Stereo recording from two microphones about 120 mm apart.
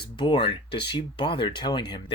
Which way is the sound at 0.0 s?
40° left (ahead or behind).